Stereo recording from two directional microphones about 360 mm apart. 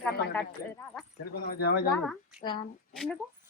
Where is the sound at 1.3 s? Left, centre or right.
Left.